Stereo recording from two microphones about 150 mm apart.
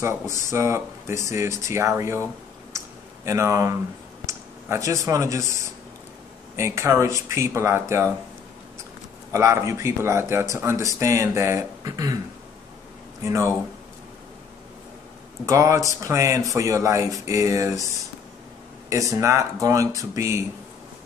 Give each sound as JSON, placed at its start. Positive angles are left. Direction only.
{"t": 0.0, "sound": "speech", "side_deg": -20}
{"t": 3.3, "sound": "speech", "side_deg": -20}
{"t": 6.5, "sound": "speech", "side_deg": -20}
{"t": 9.3, "sound": "speech", "side_deg": -20}
{"t": 13.2, "sound": "speech", "side_deg": -20}
{"t": 15.4, "sound": "speech", "side_deg": -20}
{"t": 18.9, "sound": "speech", "side_deg": -20}